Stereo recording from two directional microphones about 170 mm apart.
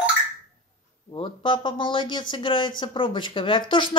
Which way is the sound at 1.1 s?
30° left (ahead or behind).